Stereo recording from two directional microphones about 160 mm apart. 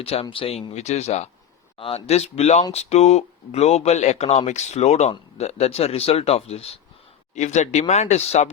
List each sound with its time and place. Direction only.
0.0 s speech: 40° left (ahead or behind)